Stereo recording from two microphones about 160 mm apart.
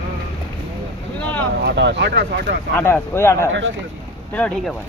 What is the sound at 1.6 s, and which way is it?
Speech, 90° right.